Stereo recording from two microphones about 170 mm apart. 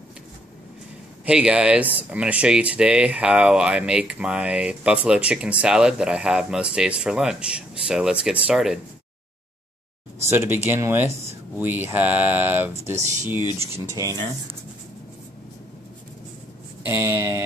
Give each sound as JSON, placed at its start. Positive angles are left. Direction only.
{"t": 1.2, "sound": "speech", "side_deg": -5}
{"t": 10.2, "sound": "speech", "side_deg": -15}
{"t": 16.8, "sound": "speech", "side_deg": -15}